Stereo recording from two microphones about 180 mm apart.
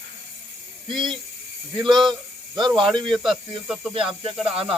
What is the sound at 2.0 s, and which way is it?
Speech, 25° right (ahead or behind).